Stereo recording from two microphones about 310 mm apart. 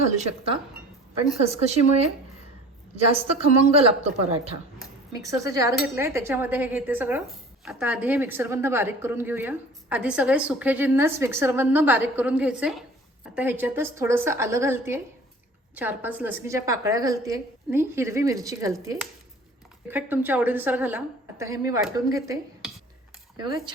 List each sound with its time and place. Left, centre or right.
0.2 s a woman's voice: centre